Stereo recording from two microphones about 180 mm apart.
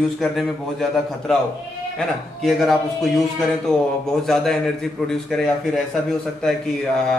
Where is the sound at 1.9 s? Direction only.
Centre (ahead or behind).